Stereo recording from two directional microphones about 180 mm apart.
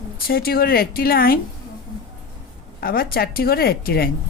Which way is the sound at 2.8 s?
55° left (ahead or behind).